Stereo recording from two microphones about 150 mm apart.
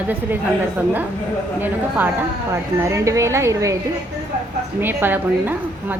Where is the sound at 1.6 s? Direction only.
10° right (ahead or behind).